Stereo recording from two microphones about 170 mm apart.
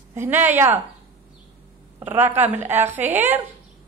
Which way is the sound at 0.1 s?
15° right (ahead or behind).